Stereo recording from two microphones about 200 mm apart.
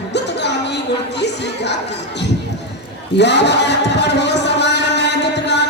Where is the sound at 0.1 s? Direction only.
60° left (ahead or behind).